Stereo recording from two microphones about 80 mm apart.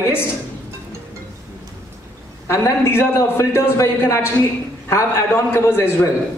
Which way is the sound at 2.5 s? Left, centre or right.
Left.